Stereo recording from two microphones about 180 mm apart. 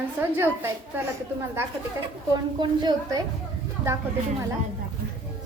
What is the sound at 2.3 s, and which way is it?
Speech, 25° right (ahead or behind).